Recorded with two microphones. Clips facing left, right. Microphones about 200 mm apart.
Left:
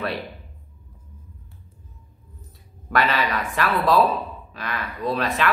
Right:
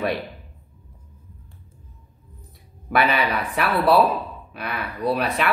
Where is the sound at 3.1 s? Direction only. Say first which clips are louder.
Right 1 dB; 10° right (ahead or behind).